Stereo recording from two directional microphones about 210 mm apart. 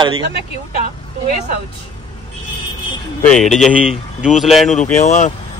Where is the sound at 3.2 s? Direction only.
5° left (ahead or behind).